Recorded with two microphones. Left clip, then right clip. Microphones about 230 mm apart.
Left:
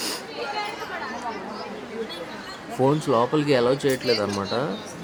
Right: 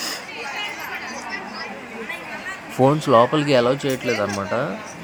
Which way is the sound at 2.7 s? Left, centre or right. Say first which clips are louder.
Right 6 dB; centre.